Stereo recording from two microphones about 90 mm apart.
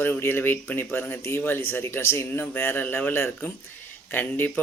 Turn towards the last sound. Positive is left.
turn(degrees=20)  # may be behind; listen again after turning